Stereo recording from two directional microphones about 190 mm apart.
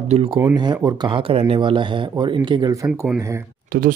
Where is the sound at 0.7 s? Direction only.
20° right (ahead or behind).